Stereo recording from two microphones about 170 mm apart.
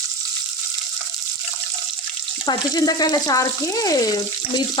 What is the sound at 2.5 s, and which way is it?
Speech, 25° left (ahead or behind).